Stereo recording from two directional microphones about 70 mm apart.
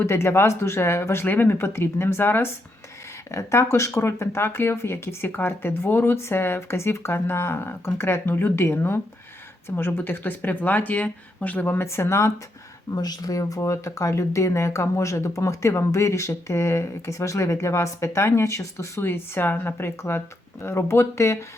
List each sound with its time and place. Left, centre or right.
0.0 s speech: left
12.9 s speech: left